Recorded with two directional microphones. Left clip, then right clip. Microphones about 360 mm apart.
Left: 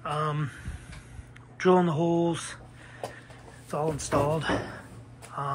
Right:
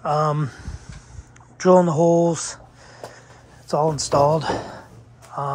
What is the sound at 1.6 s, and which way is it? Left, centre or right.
Speech, centre.